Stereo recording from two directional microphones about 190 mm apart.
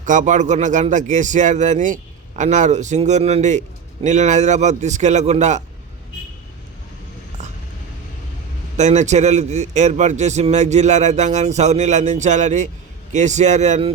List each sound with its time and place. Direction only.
0.0 s a man's voice: 40° right (ahead or behind)
8.8 s a man's voice: 40° right (ahead or behind)